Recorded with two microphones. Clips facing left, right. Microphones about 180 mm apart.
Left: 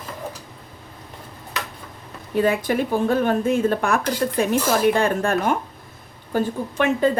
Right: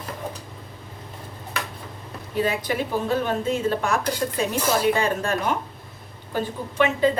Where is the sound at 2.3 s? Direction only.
50° left (ahead or behind).